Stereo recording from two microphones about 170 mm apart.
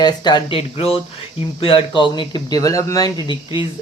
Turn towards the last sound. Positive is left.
turn(degrees=30)  # may be behind; listen again after turning